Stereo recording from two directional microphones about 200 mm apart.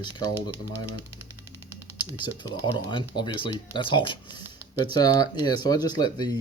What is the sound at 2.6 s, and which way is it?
Speech, 25° left (ahead or behind).